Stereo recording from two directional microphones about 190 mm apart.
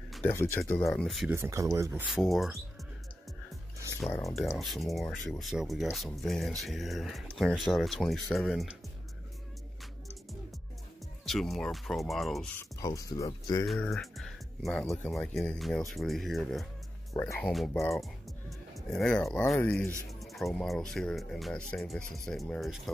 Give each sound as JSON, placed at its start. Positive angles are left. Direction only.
{"t": 0.3, "sound": "speech", "side_deg": 15}
{"t": 0.7, "sound": "speech", "side_deg": 5}
{"t": 1.3, "sound": "speech", "side_deg": -15}
{"t": 2.0, "sound": "speech", "side_deg": 0}
{"t": 4.1, "sound": "speech", "side_deg": 15}
{"t": 4.4, "sound": "speech", "side_deg": 0}
{"t": 11.2, "sound": "speech", "side_deg": 0}
{"t": 12.5, "sound": "speech", "side_deg": 15}
{"t": 13.9, "sound": "speech", "side_deg": 0}
{"t": 17.1, "sound": "speech", "side_deg": 15}
{"t": 17.4, "sound": "speech", "side_deg": 0}